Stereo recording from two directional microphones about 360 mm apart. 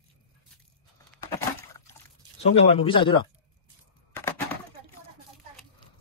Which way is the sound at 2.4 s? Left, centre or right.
Centre.